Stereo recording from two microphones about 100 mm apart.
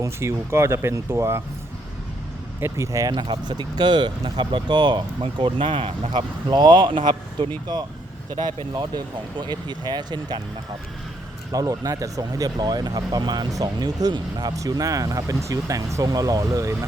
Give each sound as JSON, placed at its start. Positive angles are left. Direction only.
{"t": 0.0, "sound": "speech", "side_deg": -25}
{"t": 2.6, "sound": "speech", "side_deg": -30}
{"t": 3.1, "sound": "speech", "side_deg": -45}
{"t": 6.1, "sound": "speech", "side_deg": -45}
{"t": 11.5, "sound": "speech", "side_deg": -35}